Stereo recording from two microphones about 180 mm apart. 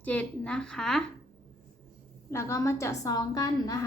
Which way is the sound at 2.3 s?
15° left (ahead or behind).